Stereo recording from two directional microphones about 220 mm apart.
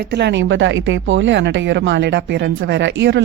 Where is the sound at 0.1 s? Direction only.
50° right (ahead or behind).